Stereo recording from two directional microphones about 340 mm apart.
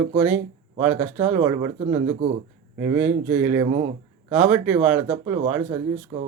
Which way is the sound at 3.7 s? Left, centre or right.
Centre.